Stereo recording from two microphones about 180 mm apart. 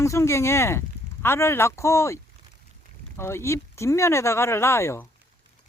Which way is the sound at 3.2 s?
15° left (ahead or behind).